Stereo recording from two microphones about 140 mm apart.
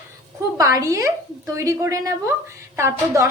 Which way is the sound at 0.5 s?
25° right (ahead or behind).